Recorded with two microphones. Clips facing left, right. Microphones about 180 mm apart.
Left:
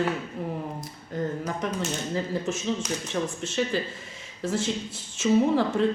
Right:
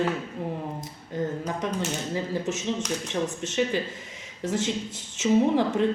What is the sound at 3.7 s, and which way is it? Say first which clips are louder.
Speech: even; 15° right (ahead or behind).